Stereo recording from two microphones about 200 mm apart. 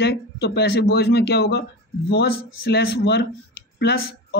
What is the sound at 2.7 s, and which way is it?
Speech, 55° left (ahead or behind).